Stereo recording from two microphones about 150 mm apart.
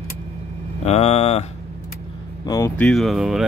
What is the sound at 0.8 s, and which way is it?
Speech, 45° left (ahead or behind).